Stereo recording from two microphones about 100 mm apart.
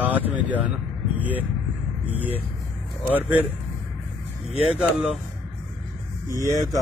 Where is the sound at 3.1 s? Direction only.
20° right (ahead or behind).